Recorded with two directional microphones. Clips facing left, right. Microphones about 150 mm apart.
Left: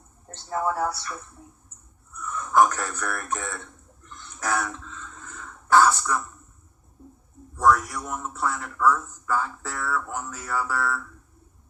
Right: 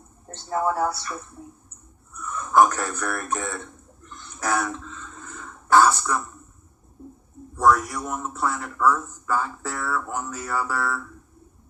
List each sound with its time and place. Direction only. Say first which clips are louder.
0.3 s a man's voice: right 2 dB; 30° right (ahead or behind)
2.2 s speech: right 2 dB; 30° right (ahead or behind)
4.1 s a sound: right 2 dB; 30° right (ahead or behind)
7.5 s a man's voice: right 1 dB; 30° right (ahead or behind)